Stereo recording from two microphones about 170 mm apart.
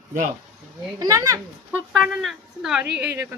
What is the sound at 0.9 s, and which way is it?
Speech, 20° right (ahead or behind).